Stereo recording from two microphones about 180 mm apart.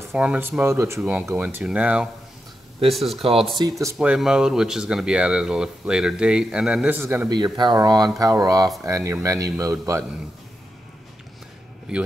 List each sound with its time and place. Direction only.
0.1 s speech: 5° right (ahead or behind)